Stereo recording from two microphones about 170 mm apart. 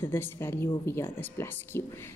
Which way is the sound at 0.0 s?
15° left (ahead or behind).